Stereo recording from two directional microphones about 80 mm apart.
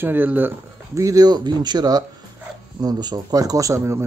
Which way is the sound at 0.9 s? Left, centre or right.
Right.